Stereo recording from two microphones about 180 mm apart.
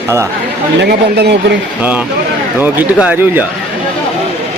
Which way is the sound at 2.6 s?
10° right (ahead or behind).